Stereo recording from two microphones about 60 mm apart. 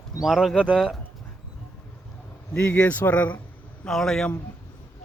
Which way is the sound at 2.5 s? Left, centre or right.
Left.